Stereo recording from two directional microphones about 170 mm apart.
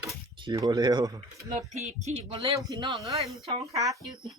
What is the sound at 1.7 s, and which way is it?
Speech, 45° right (ahead or behind).